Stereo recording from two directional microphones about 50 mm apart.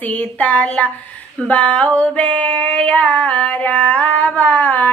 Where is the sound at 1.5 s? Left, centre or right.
Left.